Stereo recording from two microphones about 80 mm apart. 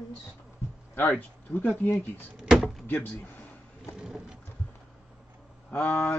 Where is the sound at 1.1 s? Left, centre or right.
Left.